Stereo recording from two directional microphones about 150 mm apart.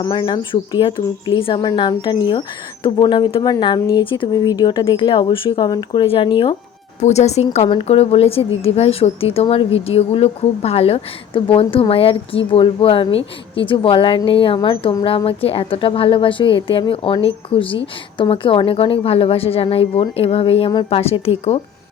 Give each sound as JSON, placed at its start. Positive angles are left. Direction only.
{"t": 0.0, "sound": "speech", "side_deg": 30}
{"t": 7.0, "sound": "speech", "side_deg": 45}